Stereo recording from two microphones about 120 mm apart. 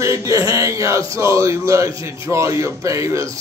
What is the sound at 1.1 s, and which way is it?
Speech, 25° right (ahead or behind).